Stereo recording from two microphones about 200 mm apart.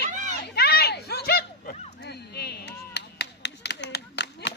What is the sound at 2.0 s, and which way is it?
Clapping, 55° left (ahead or behind).